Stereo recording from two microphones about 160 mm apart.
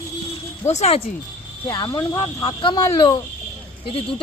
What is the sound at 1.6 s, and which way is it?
Speech, 25° left (ahead or behind).